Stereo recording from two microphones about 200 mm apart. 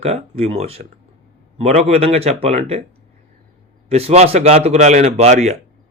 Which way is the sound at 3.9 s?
30° right (ahead or behind).